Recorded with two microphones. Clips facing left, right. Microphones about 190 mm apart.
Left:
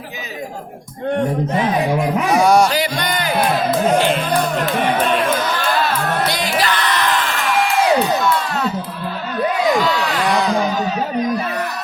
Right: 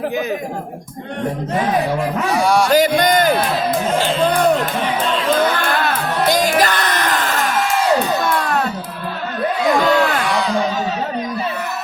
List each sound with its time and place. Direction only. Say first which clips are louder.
2.4 s music: left 3 dB; 45° left (ahead or behind)
2.6 s music: right 6 dB; 45° right (ahead or behind)
3.9 s music: left 2 dB; 20° left (ahead or behind)
4.3 s music: right 4 dB; 55° right (ahead or behind)
4.9 s music: left 2 dB; 55° left (ahead or behind)
5.4 s music: right 2 dB; 55° right (ahead or behind)
6.2 s music: right 4 dB; 45° right (ahead or behind)